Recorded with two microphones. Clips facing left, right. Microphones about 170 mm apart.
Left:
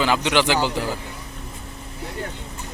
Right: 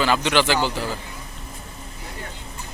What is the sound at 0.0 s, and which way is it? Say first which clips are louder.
Speech: even; 15° left (ahead or behind).